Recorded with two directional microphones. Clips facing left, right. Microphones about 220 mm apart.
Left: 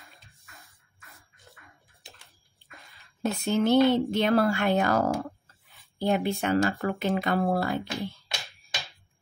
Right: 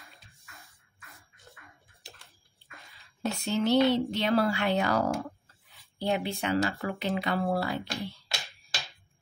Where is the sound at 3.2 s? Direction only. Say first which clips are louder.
Left 3 dB; 50° left (ahead or behind).